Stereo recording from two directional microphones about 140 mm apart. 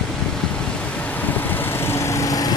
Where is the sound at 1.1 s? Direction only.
10° left (ahead or behind).